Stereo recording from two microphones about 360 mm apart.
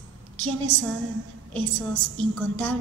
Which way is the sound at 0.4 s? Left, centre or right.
Right.